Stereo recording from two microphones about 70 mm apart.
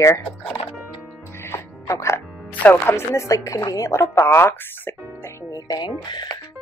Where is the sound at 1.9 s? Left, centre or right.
Left.